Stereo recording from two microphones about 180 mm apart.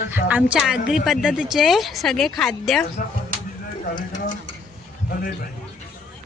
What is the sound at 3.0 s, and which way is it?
Speech, 50° left (ahead or behind).